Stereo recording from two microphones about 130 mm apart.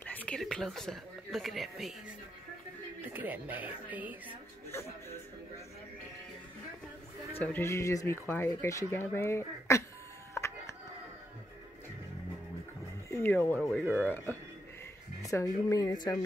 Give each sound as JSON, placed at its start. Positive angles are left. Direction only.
{"t": 0.0, "sound": "speech", "side_deg": 10}
{"t": 3.0, "sound": "speech", "side_deg": -15}
{"t": 4.7, "sound": "speech", "side_deg": 20}
{"t": 7.3, "sound": "speech", "side_deg": 15}
{"t": 10.3, "sound": "a sound", "side_deg": 20}
{"t": 13.1, "sound": "speech", "side_deg": 15}
{"t": 13.8, "sound": "speech", "side_deg": -15}
{"t": 15.2, "sound": "speech", "side_deg": 25}